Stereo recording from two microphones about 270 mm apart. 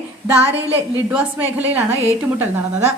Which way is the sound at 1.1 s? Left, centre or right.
Centre.